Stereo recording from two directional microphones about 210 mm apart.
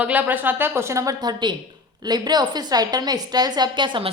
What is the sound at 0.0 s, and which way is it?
A woman's voice, 10° right (ahead or behind).